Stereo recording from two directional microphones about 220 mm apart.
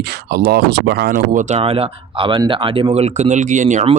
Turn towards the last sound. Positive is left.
turn(degrees=-35)  # may be behind; listen again after turning